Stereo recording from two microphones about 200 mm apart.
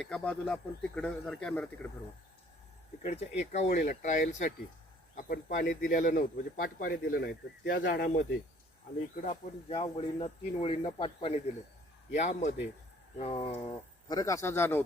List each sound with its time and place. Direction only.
0.0 s speech: 5° left (ahead or behind)
3.0 s a man's voice: 35° left (ahead or behind)
9.2 s speech: 35° left (ahead or behind)
14.1 s speech: 15° left (ahead or behind)